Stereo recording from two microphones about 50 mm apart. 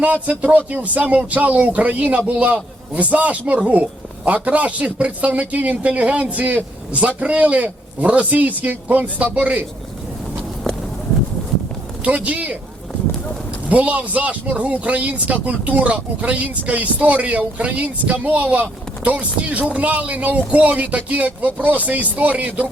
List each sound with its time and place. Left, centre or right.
0.0 s speech: right
12.0 s speech: right
13.7 s speech: right